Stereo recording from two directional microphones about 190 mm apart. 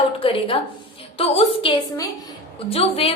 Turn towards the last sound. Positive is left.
turn(degrees=30)  # may be behind; listen again after turning